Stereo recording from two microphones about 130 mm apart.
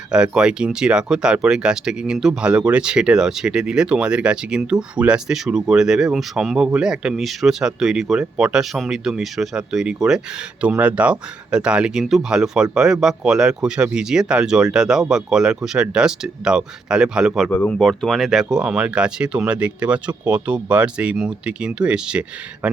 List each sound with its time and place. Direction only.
0.1 s speech: 5° right (ahead or behind)
17.5 s speech: 15° left (ahead or behind)
17.7 s speech: centre (ahead or behind)